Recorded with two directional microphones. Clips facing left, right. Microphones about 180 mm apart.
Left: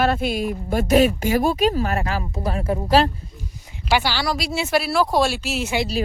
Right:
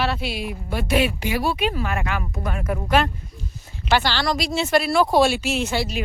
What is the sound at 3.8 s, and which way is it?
Speech, 10° left (ahead or behind).